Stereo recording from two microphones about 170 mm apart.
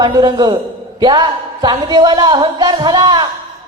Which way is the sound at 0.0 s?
25° right (ahead or behind).